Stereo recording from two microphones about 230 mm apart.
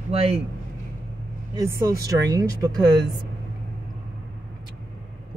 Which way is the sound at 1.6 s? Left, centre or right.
Centre.